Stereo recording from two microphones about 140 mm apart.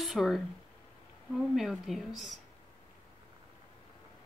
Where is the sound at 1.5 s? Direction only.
Centre (ahead or behind).